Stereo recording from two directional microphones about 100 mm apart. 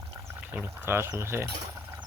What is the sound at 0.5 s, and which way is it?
Speech, 20° right (ahead or behind).